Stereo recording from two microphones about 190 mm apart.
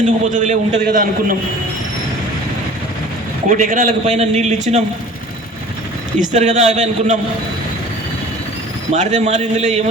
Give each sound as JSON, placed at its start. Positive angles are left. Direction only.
{"t": 0.0, "sound": "a man's voice", "side_deg": -40}
{"t": 3.5, "sound": "a man's voice", "side_deg": -40}
{"t": 6.1, "sound": "a man's voice", "side_deg": -40}
{"t": 8.9, "sound": "a man's voice", "side_deg": -40}